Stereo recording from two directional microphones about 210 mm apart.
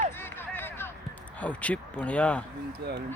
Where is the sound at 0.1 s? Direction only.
10° left (ahead or behind).